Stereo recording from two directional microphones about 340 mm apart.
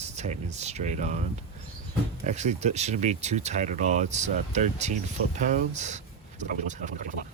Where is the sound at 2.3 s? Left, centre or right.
Centre.